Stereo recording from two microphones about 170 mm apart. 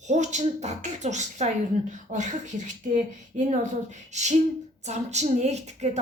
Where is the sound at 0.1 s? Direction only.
45° right (ahead or behind).